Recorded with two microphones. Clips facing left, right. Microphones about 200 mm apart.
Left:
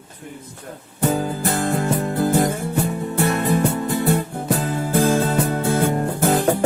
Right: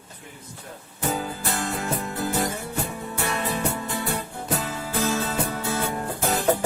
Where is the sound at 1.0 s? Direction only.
50° left (ahead or behind).